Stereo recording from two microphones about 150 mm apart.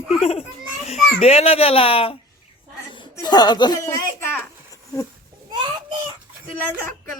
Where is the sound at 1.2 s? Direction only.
40° left (ahead or behind); by 4.0 s 25° left (ahead or behind).